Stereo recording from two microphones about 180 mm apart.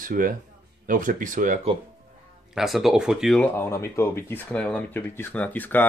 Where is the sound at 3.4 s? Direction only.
15° left (ahead or behind).